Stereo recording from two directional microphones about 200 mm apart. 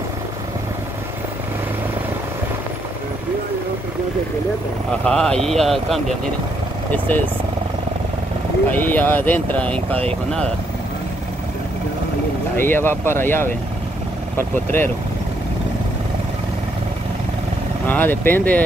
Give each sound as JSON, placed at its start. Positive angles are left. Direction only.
{"t": 5.0, "sound": "speech", "side_deg": 5}
{"t": 8.6, "sound": "speech", "side_deg": 10}
{"t": 12.5, "sound": "speech", "side_deg": 10}
{"t": 17.8, "sound": "speech", "side_deg": 10}